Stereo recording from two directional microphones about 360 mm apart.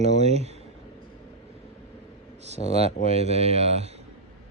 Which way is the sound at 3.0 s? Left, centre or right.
Centre.